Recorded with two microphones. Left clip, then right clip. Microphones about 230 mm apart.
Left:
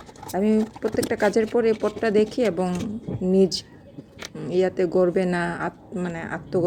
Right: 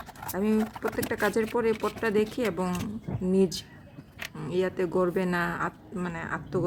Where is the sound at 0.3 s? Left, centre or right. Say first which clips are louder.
Left 6 dB; centre.